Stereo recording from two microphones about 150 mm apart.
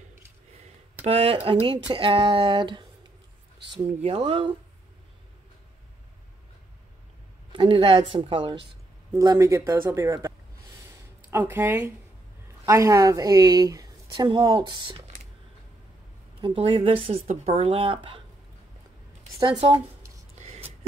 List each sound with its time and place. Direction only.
1.0 s speech: 40° right (ahead or behind)
7.5 s speech: 35° right (ahead or behind)
9.1 s a woman's voice: 20° right (ahead or behind)
10.9 s a sound: 15° right (ahead or behind)
12.6 s a woman's voice: 20° right (ahead or behind)
16.3 s speech: 35° right (ahead or behind)
19.4 s speech: 35° right (ahead or behind)
20.3 s a sound: 45° right (ahead or behind)